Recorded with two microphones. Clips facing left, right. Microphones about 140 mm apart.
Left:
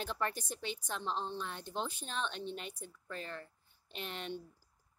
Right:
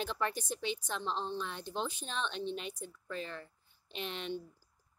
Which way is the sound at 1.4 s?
45° left (ahead or behind).